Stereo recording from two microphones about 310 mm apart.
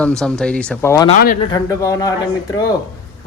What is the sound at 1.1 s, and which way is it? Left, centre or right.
Speech, left.